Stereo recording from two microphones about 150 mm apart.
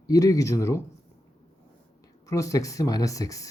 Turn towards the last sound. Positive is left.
turn(degrees=20)  # may be behind; listen again after turning